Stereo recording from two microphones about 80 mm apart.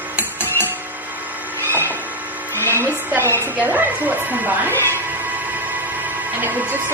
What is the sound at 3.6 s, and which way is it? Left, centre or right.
Speech, right.